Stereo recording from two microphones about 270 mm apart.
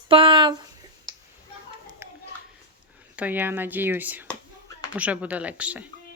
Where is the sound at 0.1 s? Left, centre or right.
Centre.